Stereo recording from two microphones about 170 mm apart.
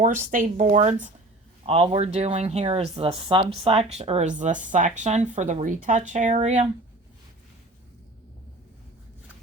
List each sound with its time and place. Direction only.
0.0 s speech: 50° right (ahead or behind)
1.6 s speech: 35° right (ahead or behind)